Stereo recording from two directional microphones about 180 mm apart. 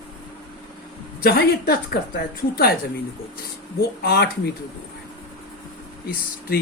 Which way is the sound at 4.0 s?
60° left (ahead or behind).